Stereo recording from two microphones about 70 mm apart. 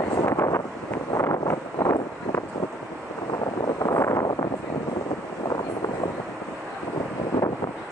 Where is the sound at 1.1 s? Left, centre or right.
Left.